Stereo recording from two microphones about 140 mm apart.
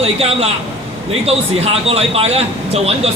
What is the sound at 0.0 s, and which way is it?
Speech, 45° right (ahead or behind).